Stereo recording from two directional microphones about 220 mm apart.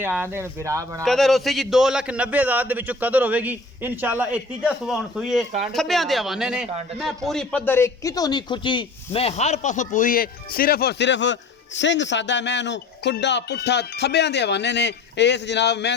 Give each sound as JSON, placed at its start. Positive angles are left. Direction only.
{"t": 0.0, "sound": "speech", "side_deg": -10}
{"t": 1.0, "sound": "a man's voice", "side_deg": 0}